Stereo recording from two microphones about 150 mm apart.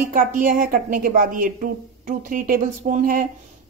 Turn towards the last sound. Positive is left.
turn(degrees=-65)  # may be behind; listen again after turning